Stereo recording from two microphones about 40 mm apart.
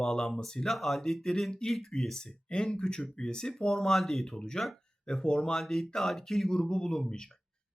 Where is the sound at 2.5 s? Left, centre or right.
Left; by 4.4 s centre.